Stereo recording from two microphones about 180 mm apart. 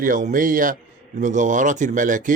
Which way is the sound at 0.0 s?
45° right (ahead or behind).